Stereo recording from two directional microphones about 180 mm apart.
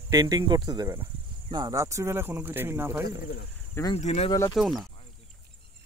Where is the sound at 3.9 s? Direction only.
35° left (ahead or behind).